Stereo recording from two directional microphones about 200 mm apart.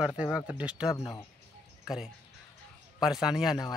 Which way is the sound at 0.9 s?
15° left (ahead or behind).